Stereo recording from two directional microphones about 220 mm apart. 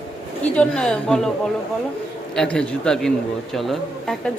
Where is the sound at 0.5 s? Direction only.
5° left (ahead or behind).